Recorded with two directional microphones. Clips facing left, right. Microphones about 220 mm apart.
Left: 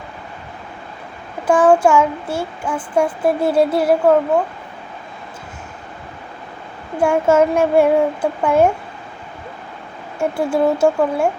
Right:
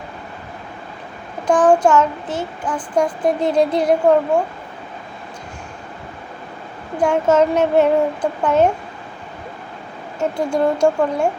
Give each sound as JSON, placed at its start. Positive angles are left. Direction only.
{"t": 1.5, "sound": "child singing", "side_deg": 10}
{"t": 6.9, "sound": "child singing", "side_deg": 10}
{"t": 10.2, "sound": "child singing", "side_deg": 5}